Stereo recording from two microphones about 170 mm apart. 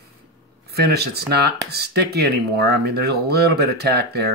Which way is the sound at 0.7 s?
70° right (ahead or behind).